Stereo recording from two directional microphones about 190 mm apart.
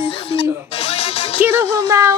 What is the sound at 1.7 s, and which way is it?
Child singing, 15° right (ahead or behind).